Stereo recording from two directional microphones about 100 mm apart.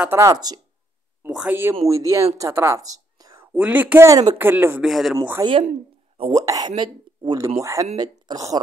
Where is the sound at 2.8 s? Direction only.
40° right (ahead or behind).